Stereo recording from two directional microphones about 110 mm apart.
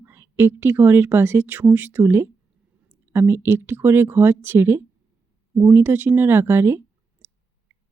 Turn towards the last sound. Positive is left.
turn(degrees=-20)  # may be behind; listen again after turning